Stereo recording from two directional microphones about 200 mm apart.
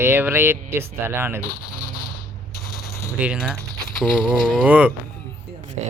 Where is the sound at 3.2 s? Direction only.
5° right (ahead or behind).